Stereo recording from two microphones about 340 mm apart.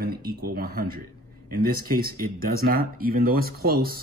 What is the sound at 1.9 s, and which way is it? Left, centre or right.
Speech, right.